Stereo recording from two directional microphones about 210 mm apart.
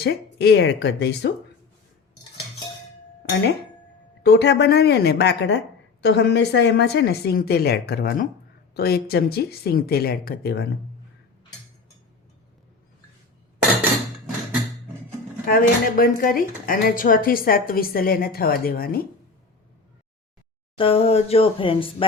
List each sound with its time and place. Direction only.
0.0 s speech: 50° left (ahead or behind)
4.2 s speech: 55° left (ahead or behind)
15.4 s speech: 45° left (ahead or behind)
20.7 s speech: 25° left (ahead or behind)